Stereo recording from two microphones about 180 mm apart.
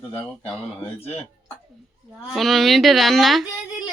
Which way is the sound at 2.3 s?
Centre (ahead or behind).